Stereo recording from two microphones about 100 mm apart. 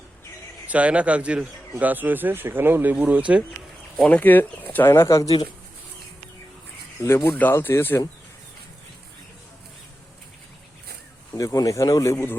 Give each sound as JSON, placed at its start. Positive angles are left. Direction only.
{"t": 0.7, "sound": "speech", "side_deg": -15}
{"t": 3.9, "sound": "speech", "side_deg": 15}
{"t": 5.0, "sound": "speech", "side_deg": 35}
{"t": 7.0, "sound": "speech", "side_deg": 30}
{"t": 7.3, "sound": "speech", "side_deg": 20}
{"t": 11.3, "sound": "speech", "side_deg": 35}